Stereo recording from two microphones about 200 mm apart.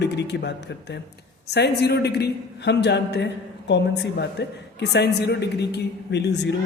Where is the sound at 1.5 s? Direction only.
55° left (ahead or behind).